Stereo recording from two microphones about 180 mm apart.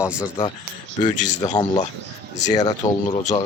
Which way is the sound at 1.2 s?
40° left (ahead or behind).